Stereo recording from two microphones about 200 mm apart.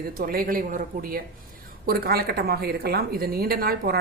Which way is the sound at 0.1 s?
50° right (ahead or behind).